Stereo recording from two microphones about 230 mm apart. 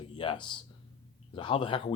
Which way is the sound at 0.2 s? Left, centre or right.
Left.